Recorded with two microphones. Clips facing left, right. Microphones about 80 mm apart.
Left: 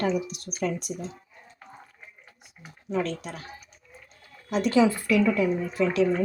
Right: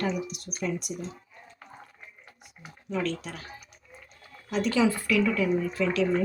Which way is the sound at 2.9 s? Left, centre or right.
Left.